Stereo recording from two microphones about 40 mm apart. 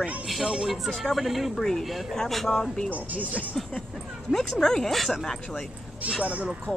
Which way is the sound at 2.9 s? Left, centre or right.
Right.